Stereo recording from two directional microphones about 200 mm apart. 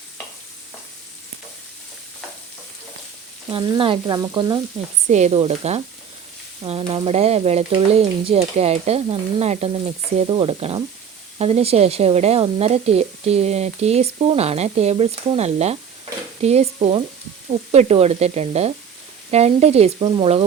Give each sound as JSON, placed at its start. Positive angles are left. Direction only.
{"t": 3.5, "sound": "frying", "side_deg": -25}
{"t": 5.0, "sound": "speech", "side_deg": -35}